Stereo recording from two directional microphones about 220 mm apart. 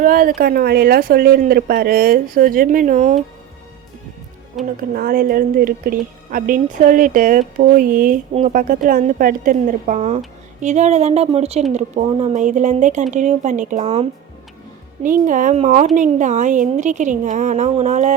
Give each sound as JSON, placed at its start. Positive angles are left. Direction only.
{"t": 0.0, "sound": "speech", "side_deg": -40}
{"t": 4.6, "sound": "speech", "side_deg": 0}
{"t": 4.9, "sound": "speech", "side_deg": -40}